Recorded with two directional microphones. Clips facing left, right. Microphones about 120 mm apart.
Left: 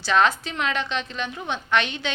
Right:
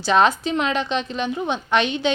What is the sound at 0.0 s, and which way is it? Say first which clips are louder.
A woman's voice: right 3 dB; 20° right (ahead or behind).